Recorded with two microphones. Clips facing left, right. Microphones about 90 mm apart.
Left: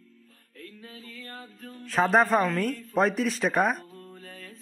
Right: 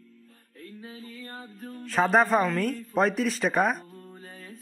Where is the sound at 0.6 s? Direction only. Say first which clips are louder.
Right 2 dB; 20° right (ahead or behind).